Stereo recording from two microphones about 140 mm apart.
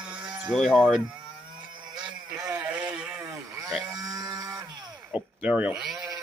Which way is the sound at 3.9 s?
25° right (ahead or behind).